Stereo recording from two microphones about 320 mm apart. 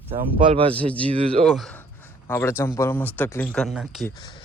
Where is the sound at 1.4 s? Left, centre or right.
Centre.